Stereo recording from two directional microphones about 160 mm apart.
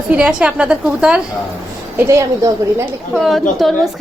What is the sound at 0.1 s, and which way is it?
A man's voice, 5° right (ahead or behind).